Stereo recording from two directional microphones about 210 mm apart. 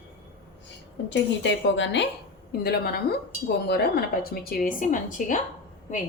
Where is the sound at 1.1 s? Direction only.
60° left (ahead or behind).